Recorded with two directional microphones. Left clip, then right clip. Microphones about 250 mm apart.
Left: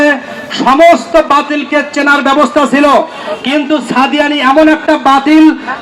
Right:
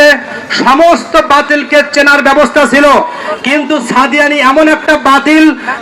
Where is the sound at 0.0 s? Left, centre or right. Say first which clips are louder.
Right 4 dB; right.